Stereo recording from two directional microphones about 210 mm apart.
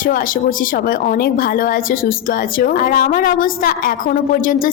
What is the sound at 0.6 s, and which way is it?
A woman's voice, 40° left (ahead or behind).